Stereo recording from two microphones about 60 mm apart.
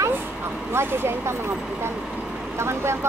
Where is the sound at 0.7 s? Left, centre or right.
Right.